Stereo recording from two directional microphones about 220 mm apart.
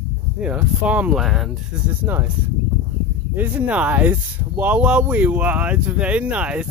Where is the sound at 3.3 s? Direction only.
10° right (ahead or behind).